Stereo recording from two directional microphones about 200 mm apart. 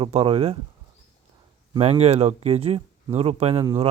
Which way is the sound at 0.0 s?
30° right (ahead or behind).